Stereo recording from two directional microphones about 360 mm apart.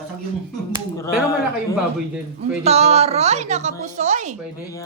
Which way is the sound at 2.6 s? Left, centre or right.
Centre.